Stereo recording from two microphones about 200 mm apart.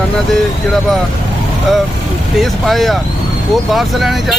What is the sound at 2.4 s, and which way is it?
Speech, centre (ahead or behind).